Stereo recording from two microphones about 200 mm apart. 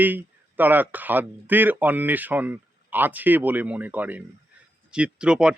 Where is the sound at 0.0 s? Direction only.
10° right (ahead or behind).